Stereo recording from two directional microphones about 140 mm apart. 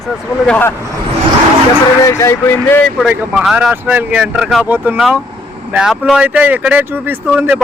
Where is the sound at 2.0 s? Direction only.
20° left (ahead or behind).